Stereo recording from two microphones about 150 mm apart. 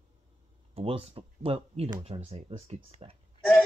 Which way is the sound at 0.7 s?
40° right (ahead or behind).